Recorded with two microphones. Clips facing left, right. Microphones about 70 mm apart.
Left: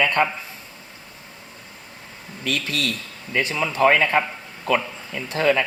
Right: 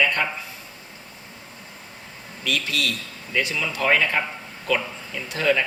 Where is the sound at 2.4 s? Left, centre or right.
Left.